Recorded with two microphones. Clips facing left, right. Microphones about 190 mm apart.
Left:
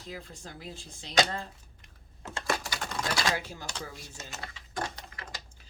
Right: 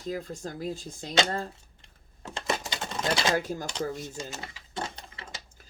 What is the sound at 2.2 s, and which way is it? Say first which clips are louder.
Typewriter: right 1 dB; 20° right (ahead or behind).